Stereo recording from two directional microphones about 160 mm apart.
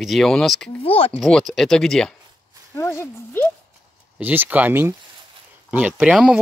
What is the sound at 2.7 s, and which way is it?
Speech, 15° left (ahead or behind).